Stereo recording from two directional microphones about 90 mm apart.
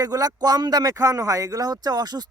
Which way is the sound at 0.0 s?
45° right (ahead or behind).